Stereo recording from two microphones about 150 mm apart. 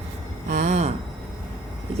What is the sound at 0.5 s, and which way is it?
Speech, 50° right (ahead or behind).